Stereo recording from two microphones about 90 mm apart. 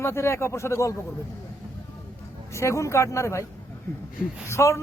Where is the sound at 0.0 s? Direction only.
30° left (ahead or behind).